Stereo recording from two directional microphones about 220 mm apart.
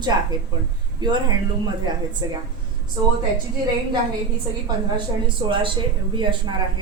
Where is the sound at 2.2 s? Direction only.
15° right (ahead or behind).